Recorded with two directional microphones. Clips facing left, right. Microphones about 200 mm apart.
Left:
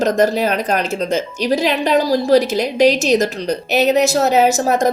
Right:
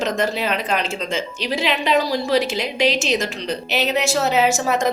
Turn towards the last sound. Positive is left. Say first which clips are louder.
# left 4 dB
turn(degrees=40)  # may be behind; listen again after turning